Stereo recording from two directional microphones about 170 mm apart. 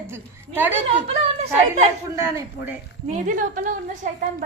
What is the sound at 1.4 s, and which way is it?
Speech, 40° right (ahead or behind).